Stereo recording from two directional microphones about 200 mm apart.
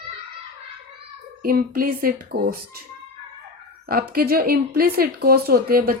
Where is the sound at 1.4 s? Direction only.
50° right (ahead or behind).